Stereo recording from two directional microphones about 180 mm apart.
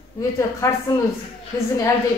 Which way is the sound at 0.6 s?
15° left (ahead or behind).